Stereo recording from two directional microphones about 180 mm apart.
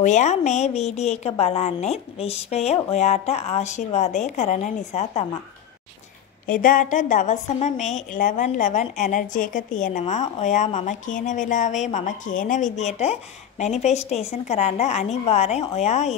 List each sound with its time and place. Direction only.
0.0 s a woman's voice: 40° left (ahead or behind)
6.4 s a woman's voice: 50° left (ahead or behind)